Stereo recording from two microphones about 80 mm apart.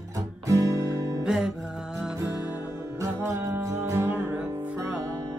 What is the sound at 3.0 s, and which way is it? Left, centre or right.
Music, right.